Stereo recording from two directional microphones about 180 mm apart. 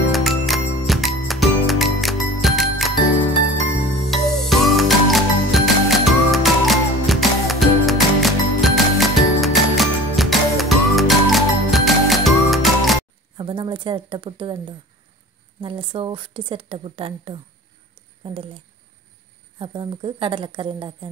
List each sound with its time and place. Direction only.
0.1 s music: centre (ahead or behind)
4.1 s music: centre (ahead or behind)
13.4 s speech: 30° right (ahead or behind)
15.6 s a woman's voice: 25° right (ahead or behind)
19.6 s a woman's voice: 30° right (ahead or behind)